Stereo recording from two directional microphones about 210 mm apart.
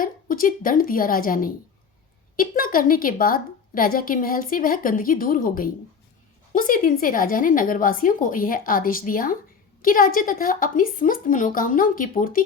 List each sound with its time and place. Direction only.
0.0 s a woman's voice: 40° left (ahead or behind)